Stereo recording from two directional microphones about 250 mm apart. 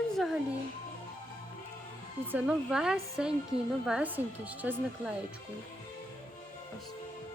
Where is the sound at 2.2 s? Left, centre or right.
Centre.